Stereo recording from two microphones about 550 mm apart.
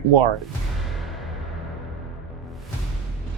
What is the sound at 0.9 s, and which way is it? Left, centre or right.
Music, centre.